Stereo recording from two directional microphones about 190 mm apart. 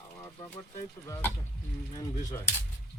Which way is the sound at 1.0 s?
15° left (ahead or behind).